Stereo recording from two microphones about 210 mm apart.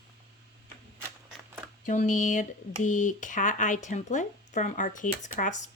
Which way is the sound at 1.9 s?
35° left (ahead or behind).